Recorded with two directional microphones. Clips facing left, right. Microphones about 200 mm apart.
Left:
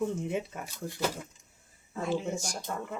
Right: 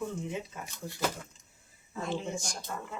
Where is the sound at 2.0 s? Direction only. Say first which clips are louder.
Left 3 dB; 5° left (ahead or behind).